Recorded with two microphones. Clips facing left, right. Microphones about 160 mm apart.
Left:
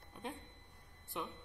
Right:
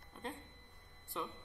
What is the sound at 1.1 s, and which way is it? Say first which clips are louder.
Speech: even; 10° left (ahead or behind).